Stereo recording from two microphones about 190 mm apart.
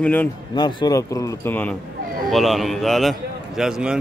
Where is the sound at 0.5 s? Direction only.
20° left (ahead or behind).